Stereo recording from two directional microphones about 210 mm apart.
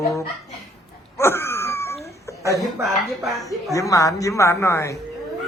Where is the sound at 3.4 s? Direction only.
15° left (ahead or behind).